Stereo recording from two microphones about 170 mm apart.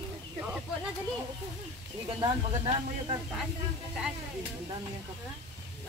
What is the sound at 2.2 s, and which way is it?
Speech, 30° right (ahead or behind).